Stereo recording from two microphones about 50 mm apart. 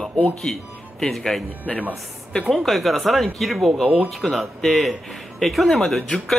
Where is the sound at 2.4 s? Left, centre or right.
Centre.